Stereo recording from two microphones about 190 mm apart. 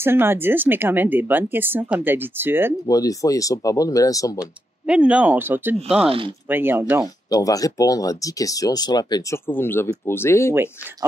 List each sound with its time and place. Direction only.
0.0 s speech: 10° right (ahead or behind)
2.9 s speech: 20° left (ahead or behind)
4.4 s speech: 5° right (ahead or behind)
6.0 s speech: 30° right (ahead or behind)
6.5 s speech: 10° right (ahead or behind)
7.2 s speech: 20° left (ahead or behind)
9.5 s speech: 10° left (ahead or behind)
10.5 s speech: 10° right (ahead or behind)